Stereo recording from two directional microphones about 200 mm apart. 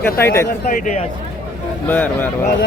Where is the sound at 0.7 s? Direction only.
40° left (ahead or behind).